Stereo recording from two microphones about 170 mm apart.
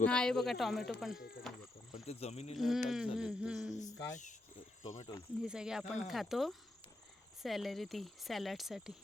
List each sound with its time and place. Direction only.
0.0 s speech: 5° left (ahead or behind)
1.9 s speech: 35° left (ahead or behind)
2.6 s speech: centre (ahead or behind)
3.8 s speech: 20° left (ahead or behind)
4.1 s speech: 45° left (ahead or behind)
5.4 s speech: 5° right (ahead or behind)